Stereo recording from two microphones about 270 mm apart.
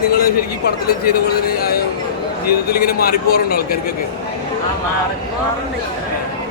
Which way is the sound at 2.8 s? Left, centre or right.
Left.